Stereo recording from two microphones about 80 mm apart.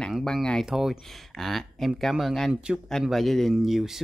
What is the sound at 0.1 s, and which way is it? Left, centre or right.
Speech, centre.